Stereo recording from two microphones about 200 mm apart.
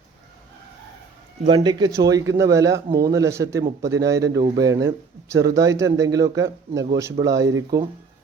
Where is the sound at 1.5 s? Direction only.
20° right (ahead or behind).